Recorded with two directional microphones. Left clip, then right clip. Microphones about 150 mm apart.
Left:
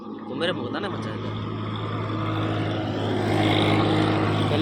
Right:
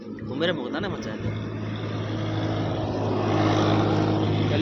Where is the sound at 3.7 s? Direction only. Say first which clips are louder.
Left 2 dB; 50° left (ahead or behind).